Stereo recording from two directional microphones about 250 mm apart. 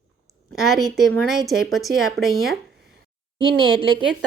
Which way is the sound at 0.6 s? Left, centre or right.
Centre.